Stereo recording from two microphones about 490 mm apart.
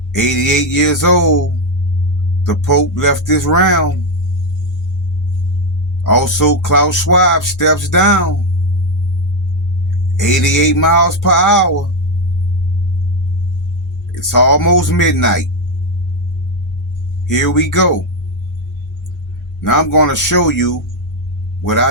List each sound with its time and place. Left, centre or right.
0.1 s speech: left
2.4 s speech: left
6.0 s speech: left
10.2 s speech: left
14.2 s speech: left
17.2 s speech: left
19.6 s a man's voice: left